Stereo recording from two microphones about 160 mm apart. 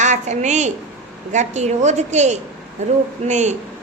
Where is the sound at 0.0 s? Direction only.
50° right (ahead or behind).